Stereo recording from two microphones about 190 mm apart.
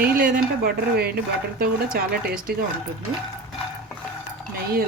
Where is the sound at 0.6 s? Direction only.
55° right (ahead or behind).